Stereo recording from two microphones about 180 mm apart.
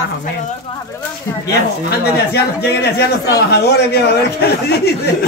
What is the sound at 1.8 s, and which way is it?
Speech, 65° left (ahead or behind).